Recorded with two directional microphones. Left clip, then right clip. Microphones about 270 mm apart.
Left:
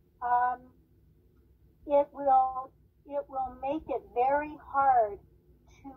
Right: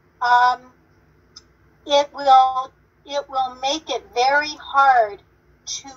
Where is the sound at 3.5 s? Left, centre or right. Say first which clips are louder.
Right 9 dB; centre.